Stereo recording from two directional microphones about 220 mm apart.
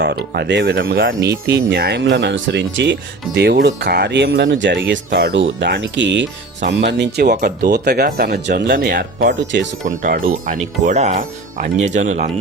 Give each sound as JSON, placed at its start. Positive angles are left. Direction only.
{"t": 0.0, "sound": "speech", "side_deg": -50}
{"t": 9.8, "sound": "speech", "side_deg": -35}